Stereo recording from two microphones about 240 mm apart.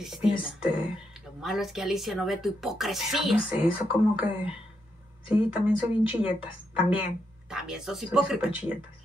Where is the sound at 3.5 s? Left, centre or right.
Left.